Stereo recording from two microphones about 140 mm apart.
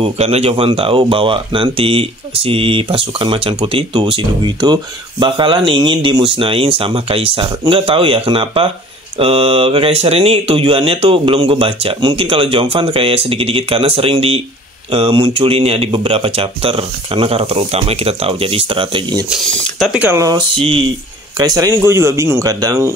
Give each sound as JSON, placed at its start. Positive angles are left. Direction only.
{"t": 0.0, "sound": "speech", "side_deg": -45}
{"t": 19.2, "sound": "speech", "side_deg": -5}
{"t": 20.1, "sound": "speech", "side_deg": -25}
{"t": 20.5, "sound": "speech", "side_deg": -40}
{"t": 21.4, "sound": "speech", "side_deg": -25}